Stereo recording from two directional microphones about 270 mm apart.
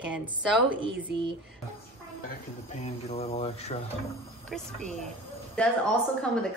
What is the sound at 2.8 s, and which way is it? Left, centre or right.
Mantra, left.